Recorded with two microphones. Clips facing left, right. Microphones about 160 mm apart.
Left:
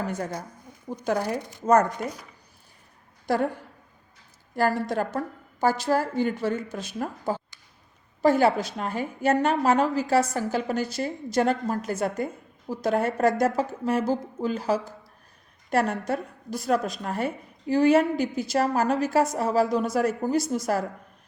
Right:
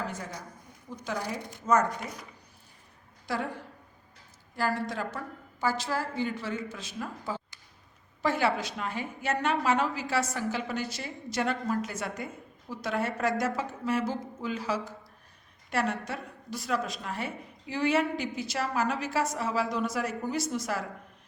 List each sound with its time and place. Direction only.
0.2 s a woman's voice: 50° left (ahead or behind)
3.2 s a woman's voice: 50° left (ahead or behind)
4.9 s a woman's voice: 50° left (ahead or behind)